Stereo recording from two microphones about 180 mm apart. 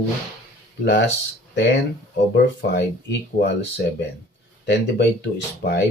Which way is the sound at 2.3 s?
75° left (ahead or behind).